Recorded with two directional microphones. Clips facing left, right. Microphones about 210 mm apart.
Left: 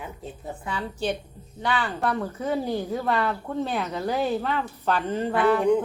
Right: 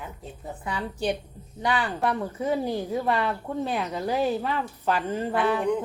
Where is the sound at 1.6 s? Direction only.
15° right (ahead or behind).